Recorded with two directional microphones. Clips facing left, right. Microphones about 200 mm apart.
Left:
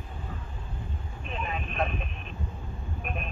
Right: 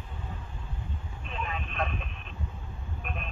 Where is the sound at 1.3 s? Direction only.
5° left (ahead or behind).